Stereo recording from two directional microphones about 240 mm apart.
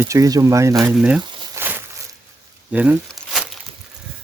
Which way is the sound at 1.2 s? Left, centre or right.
Centre.